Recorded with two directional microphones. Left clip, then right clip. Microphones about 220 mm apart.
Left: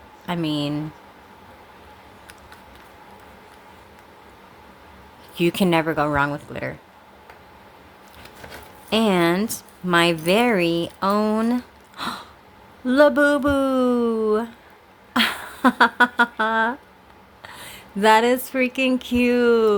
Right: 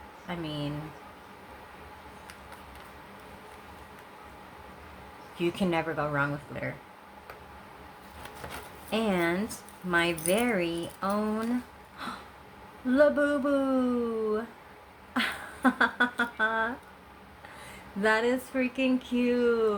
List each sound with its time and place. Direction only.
0.3 s speech: 50° left (ahead or behind)
5.4 s speech: 50° left (ahead or behind)
8.9 s speech: 50° left (ahead or behind)
11.9 s a sound: 50° left (ahead or behind)
12.9 s speech: 50° left (ahead or behind)
18.0 s speech: 50° left (ahead or behind)